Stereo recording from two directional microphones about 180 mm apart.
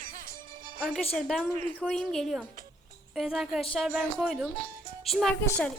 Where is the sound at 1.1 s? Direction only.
5° left (ahead or behind).